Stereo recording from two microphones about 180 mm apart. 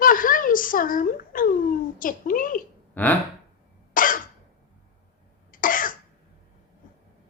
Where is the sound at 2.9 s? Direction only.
10° left (ahead or behind).